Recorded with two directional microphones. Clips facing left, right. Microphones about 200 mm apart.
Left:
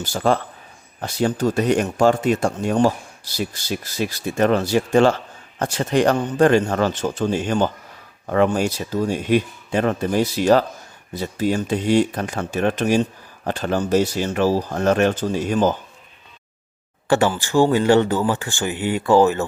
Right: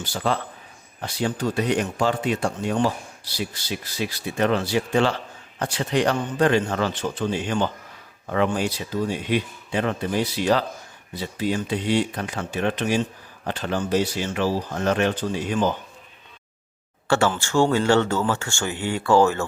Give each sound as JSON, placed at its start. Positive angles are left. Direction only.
{"t": 0.0, "sound": "speech", "side_deg": 45}
{"t": 17.1, "sound": "speech", "side_deg": 15}